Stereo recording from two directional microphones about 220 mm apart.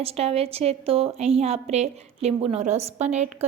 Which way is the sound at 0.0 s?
25° right (ahead or behind).